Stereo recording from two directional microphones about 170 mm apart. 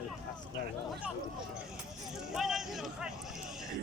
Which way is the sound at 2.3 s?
Centre (ahead or behind).